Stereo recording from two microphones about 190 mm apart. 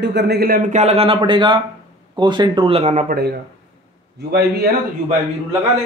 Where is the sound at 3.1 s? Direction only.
55° right (ahead or behind).